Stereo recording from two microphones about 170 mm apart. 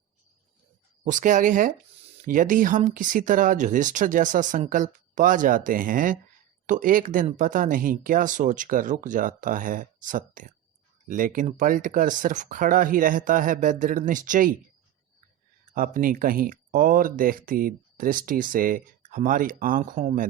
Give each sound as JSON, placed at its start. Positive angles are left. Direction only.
{"t": 1.0, "sound": "speech", "side_deg": -45}
{"t": 15.7, "sound": "speech", "side_deg": -55}